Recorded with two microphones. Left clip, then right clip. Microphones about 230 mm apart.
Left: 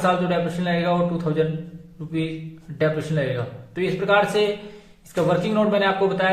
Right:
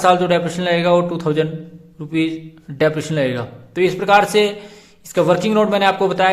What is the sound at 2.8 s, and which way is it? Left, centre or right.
A man's voice, right.